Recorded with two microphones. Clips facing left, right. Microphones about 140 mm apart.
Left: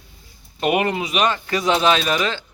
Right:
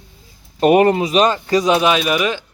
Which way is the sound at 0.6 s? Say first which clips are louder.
Right 8 dB; 40° right (ahead or behind).